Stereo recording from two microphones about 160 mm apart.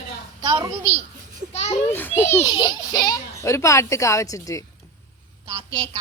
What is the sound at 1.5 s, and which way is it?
Children playing, 40° left (ahead or behind).